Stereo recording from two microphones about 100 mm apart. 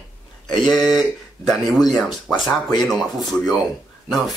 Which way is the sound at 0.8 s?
Centre (ahead or behind).